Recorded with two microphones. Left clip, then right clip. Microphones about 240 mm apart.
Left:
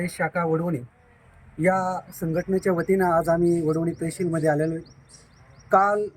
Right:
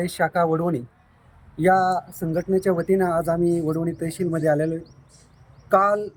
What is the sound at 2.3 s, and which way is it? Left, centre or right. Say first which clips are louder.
Speech: right 2 dB; centre.